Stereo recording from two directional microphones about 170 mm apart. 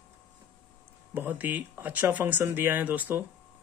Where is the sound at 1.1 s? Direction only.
10° right (ahead or behind).